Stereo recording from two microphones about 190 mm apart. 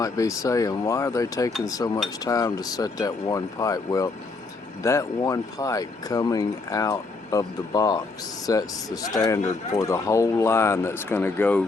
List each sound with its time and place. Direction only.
0.0 s speech: 15° left (ahead or behind)